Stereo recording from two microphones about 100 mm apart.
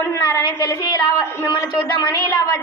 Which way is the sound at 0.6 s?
35° left (ahead or behind).